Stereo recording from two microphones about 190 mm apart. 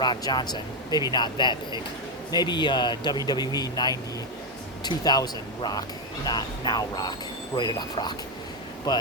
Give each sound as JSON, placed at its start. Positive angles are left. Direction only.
{"t": 0.0, "sound": "speech", "side_deg": 25}